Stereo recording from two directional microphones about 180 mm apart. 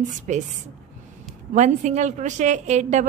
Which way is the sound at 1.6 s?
40° right (ahead or behind).